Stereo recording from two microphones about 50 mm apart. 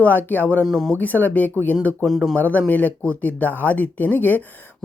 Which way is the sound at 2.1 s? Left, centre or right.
Centre.